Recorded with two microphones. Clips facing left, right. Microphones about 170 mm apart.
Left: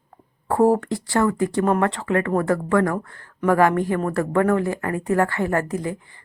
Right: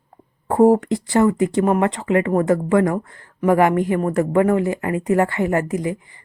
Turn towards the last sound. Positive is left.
turn(degrees=-15)  # may be behind; listen again after turning